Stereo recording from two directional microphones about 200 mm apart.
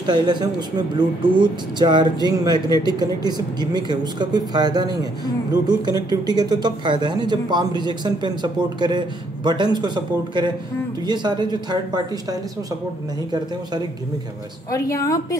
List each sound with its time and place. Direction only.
0.0 s speech: 20° right (ahead or behind)
14.7 s speech: 15° left (ahead or behind)